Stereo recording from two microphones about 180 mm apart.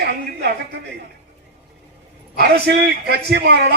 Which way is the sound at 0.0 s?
65° right (ahead or behind).